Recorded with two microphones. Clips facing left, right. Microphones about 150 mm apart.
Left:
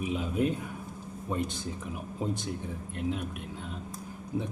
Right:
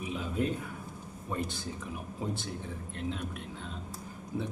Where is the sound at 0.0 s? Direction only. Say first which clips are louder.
Left 4 dB; 15° left (ahead or behind).